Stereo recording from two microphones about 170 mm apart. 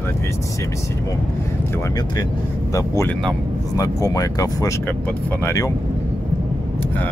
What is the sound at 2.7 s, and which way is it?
Speech, 20° left (ahead or behind).